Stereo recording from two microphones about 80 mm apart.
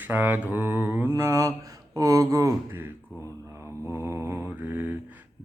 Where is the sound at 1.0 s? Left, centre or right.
Right.